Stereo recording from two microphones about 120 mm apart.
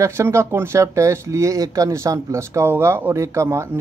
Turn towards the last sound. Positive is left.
turn(degrees=-20)  # may be behind; listen again after turning